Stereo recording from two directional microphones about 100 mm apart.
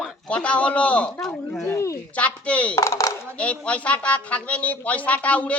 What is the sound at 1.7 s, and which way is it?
Speech, 30° left (ahead or behind).